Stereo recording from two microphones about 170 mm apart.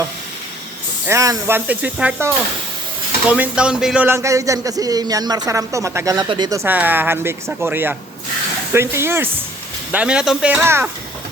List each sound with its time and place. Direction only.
1.0 s speech: 20° right (ahead or behind)